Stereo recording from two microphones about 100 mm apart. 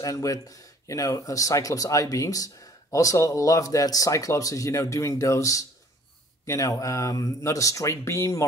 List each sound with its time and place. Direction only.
0.0 s speech: 35° left (ahead or behind)